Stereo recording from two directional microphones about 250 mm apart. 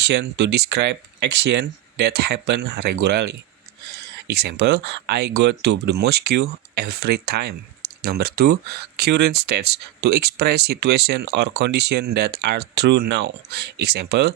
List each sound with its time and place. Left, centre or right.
0.0 s speech: right